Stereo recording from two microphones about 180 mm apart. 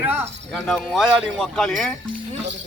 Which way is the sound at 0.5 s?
Centre (ahead or behind).